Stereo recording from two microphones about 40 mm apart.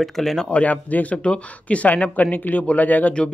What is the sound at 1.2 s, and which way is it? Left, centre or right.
Speech, left.